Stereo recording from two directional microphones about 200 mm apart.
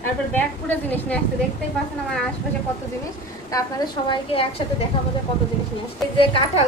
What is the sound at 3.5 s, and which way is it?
A woman's voice, 20° left (ahead or behind).